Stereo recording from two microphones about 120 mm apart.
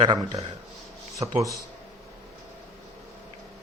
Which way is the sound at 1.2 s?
55° right (ahead or behind).